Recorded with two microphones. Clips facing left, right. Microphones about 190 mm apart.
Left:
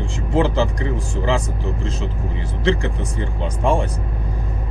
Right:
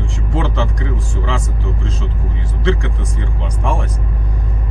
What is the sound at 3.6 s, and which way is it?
Speech, 30° left (ahead or behind).